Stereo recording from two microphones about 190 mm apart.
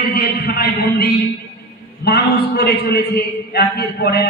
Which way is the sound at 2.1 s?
55° left (ahead or behind).